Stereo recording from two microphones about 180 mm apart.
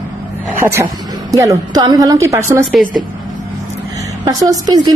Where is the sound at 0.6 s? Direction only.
15° right (ahead or behind).